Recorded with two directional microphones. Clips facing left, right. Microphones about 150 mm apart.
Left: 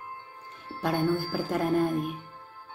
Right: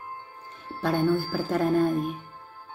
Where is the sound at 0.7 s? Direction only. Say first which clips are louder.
Right 3 dB; 15° left (ahead or behind).